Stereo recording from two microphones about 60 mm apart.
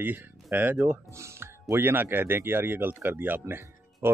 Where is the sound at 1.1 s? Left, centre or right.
Right.